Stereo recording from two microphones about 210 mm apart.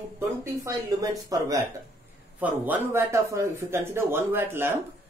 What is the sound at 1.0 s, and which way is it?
Speech, 15° right (ahead or behind).